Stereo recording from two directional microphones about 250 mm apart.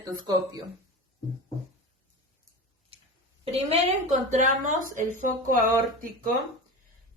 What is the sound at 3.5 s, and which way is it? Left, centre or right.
A woman's voice, right.